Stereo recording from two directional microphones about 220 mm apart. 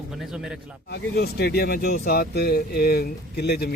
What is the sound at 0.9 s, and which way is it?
Speech, 45° left (ahead or behind).